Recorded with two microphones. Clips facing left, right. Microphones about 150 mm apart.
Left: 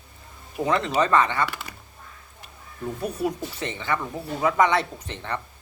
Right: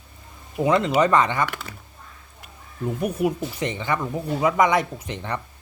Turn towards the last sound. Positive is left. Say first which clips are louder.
# right 2 dB
turn(degrees=-15)  # may be behind; listen again after turning